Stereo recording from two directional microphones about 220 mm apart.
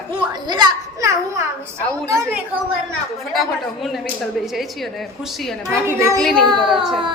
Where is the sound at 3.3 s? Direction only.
Centre (ahead or behind).